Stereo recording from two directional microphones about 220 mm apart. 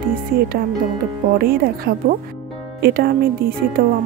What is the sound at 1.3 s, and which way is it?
Speech, 45° right (ahead or behind).